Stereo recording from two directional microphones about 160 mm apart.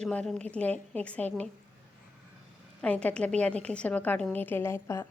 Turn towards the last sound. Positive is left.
turn(degrees=15)  # may be behind; listen again after turning